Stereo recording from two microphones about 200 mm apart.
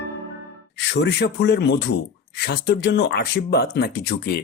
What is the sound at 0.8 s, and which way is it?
Speech, 60° left (ahead or behind).